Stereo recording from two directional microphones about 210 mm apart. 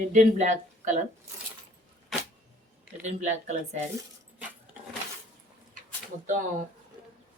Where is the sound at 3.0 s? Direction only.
35° right (ahead or behind).